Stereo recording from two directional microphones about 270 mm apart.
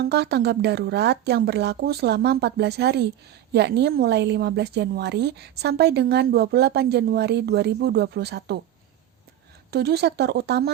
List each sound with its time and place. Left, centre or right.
0.0 s a woman's voice: right
9.7 s a woman's voice: right